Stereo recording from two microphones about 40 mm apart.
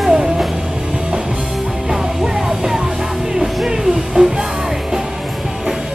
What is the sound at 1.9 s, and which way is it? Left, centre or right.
Music, centre.